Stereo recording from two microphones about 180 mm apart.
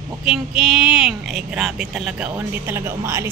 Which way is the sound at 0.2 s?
5° right (ahead or behind).